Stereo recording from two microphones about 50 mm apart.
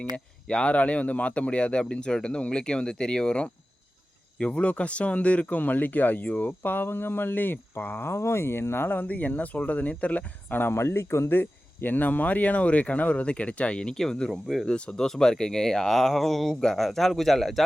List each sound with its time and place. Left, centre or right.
0.4 s speech: left
6.6 s speech: left
8.0 s speech: left
10.6 s speech: left
11.3 s speech: left; by 14.7 s centre
14.7 s speech: centre